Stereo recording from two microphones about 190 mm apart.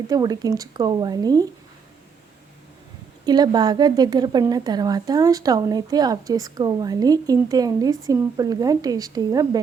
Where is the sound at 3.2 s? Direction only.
20° right (ahead or behind).